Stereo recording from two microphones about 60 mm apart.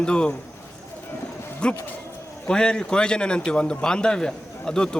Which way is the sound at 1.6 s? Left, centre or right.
Centre.